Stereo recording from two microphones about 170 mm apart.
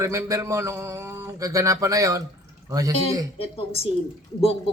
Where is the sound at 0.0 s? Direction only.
20° right (ahead or behind).